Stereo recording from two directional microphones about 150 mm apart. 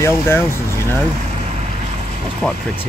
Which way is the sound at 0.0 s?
15° left (ahead or behind).